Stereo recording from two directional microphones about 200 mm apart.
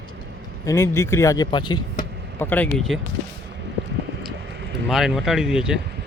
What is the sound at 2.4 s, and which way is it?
Speech, 10° left (ahead or behind).